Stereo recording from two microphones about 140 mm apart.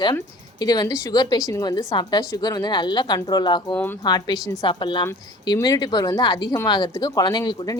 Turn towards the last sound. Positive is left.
turn(degrees=30)  # may be behind; listen again after turning